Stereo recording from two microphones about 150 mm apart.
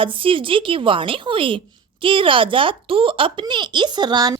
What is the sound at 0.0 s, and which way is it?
A woman's voice, 35° right (ahead or behind).